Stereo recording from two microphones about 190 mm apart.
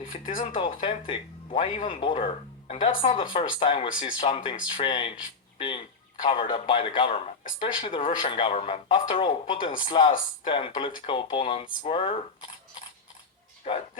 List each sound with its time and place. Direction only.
0.3 s speech: 25° left (ahead or behind)